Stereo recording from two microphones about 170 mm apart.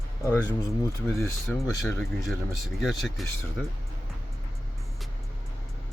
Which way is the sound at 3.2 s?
Centre (ahead or behind).